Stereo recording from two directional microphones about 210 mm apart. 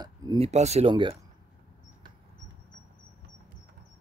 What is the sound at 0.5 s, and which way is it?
Speech, 30° right (ahead or behind).